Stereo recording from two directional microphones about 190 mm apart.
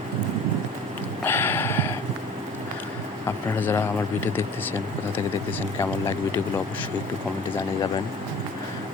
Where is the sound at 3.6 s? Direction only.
10° left (ahead or behind).